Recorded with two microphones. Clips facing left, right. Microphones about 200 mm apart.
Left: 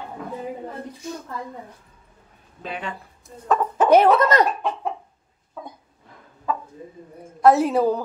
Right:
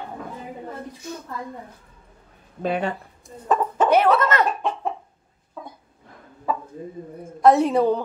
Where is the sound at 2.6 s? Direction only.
40° right (ahead or behind).